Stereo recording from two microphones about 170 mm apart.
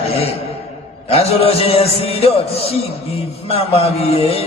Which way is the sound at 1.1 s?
35° left (ahead or behind).